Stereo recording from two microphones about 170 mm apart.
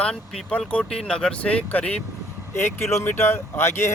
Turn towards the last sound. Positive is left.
turn(degrees=15)  # may be behind; listen again after turning